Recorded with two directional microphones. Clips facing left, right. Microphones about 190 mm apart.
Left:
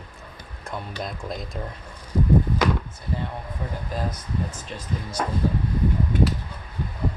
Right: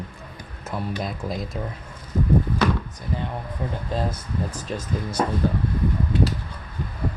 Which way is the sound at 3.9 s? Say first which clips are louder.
Right 2 dB; 25° right (ahead or behind).